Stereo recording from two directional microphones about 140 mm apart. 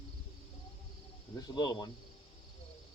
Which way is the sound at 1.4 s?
30° left (ahead or behind).